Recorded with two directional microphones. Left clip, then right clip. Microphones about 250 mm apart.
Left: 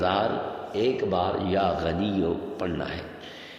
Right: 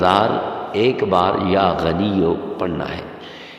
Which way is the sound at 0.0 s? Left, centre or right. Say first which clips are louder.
Right 9 dB; right.